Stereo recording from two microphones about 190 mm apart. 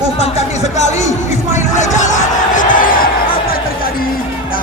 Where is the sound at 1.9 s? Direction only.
40° left (ahead or behind).